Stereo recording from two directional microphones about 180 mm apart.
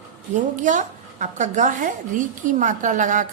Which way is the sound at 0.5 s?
45° right (ahead or behind).